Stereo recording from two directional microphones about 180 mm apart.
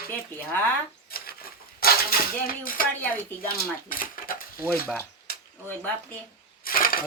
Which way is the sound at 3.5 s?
50° left (ahead or behind).